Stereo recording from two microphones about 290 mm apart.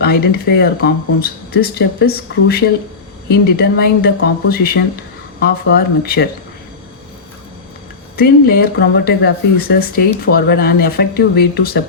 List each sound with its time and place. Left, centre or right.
0.0 s speech: left
8.1 s speech: left